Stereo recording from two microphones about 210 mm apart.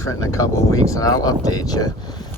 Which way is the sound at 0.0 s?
15° left (ahead or behind).